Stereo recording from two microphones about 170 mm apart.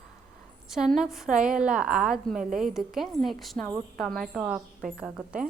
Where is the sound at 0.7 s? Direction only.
5° right (ahead or behind).